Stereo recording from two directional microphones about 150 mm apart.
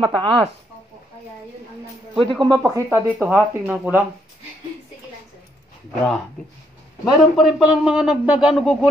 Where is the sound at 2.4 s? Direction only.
25° right (ahead or behind).